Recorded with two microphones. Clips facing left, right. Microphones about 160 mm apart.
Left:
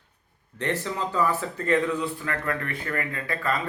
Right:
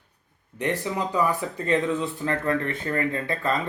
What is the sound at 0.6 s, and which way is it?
Speech, 15° right (ahead or behind).